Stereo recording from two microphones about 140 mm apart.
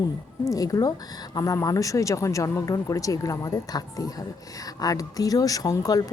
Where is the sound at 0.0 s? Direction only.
25° left (ahead or behind).